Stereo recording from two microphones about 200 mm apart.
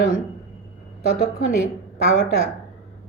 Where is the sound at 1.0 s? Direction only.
50° left (ahead or behind).